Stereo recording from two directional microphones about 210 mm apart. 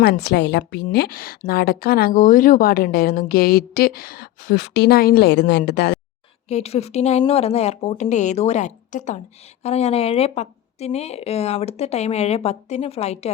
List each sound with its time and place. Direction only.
0.0 s a woman's voice: 50° left (ahead or behind)
6.5 s a woman's voice: 30° left (ahead or behind)